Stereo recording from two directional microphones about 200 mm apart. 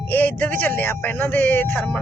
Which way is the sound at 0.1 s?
10° left (ahead or behind).